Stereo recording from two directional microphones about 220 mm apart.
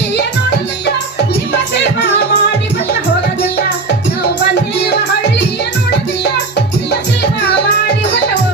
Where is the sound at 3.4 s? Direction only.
55° left (ahead or behind).